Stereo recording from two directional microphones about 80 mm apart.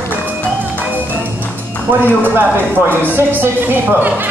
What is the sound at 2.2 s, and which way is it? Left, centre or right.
Speech, right.